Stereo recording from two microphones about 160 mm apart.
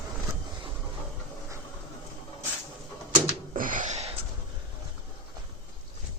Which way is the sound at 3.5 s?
55° right (ahead or behind).